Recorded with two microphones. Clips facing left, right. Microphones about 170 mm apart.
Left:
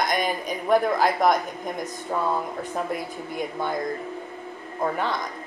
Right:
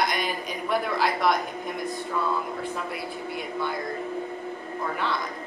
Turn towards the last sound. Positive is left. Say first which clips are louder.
# left 3 dB
turn(degrees=40)  # may be behind; listen again after turning